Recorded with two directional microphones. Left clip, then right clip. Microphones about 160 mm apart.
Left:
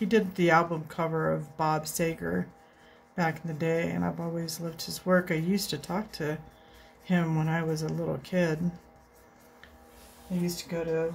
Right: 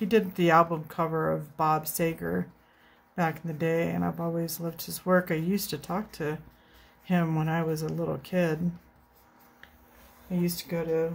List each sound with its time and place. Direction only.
0.0 s speech: 25° right (ahead or behind)
10.4 s speech: 45° right (ahead or behind)